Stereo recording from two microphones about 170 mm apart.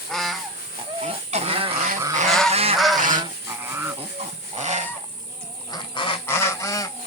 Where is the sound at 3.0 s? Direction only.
50° right (ahead or behind).